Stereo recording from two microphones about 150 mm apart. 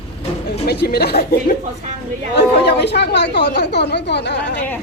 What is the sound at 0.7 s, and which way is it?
A man's voice, 90° left.